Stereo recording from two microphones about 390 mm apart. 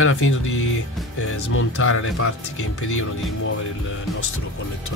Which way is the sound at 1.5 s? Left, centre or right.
Left.